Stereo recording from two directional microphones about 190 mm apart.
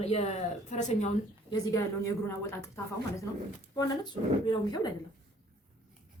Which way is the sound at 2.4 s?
15° left (ahead or behind).